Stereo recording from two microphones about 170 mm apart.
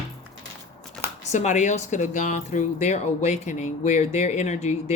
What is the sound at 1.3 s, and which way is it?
Speech, 45° left (ahead or behind).